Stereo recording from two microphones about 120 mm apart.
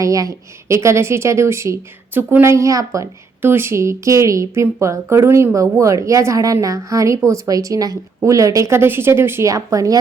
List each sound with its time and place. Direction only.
0.0 s speech: 30° right (ahead or behind)